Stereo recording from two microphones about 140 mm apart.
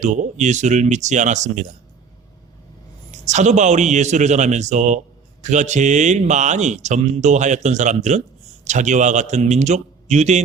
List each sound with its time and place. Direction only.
0.0 s a man's voice: 60° right (ahead or behind)
3.1 s a man's voice: 55° right (ahead or behind)